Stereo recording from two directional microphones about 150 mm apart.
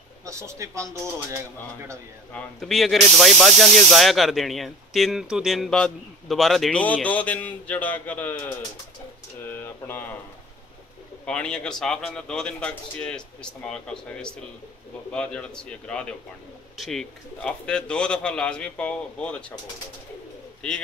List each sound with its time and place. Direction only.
0.2 s a man's voice: 20° right (ahead or behind)
2.3 s speech: centre (ahead or behind)
9.5 s a sound: 15° left (ahead or behind)
11.2 s a man's voice: 5° left (ahead or behind)